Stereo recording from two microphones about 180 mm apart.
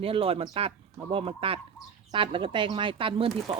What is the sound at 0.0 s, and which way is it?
Speech, 30° right (ahead or behind).